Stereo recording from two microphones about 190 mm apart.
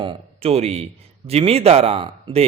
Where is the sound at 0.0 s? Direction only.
30° right (ahead or behind).